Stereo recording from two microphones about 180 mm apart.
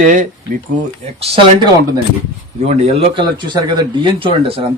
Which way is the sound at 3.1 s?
25° right (ahead or behind).